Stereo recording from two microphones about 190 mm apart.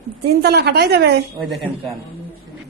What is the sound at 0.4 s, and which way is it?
Speech, 60° right (ahead or behind).